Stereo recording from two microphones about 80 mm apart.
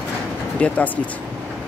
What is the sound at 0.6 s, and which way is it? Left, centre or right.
Speech, centre.